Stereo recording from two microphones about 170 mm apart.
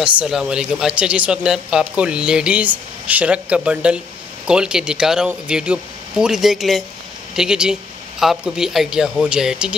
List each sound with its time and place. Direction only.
0.0 s speech: 5° right (ahead or behind)